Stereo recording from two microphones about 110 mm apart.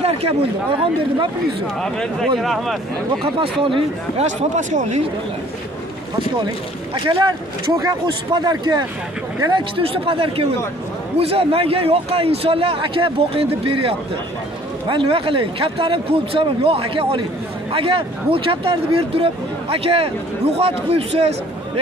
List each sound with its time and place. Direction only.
0.0 s speech: 65° right (ahead or behind)
1.8 s speech: 5° left (ahead or behind)
3.2 s speech: 50° right (ahead or behind)
4.2 s speech: 90° right
7.7 s speech: 40° right (ahead or behind); by 21.3 s 65° right (ahead or behind)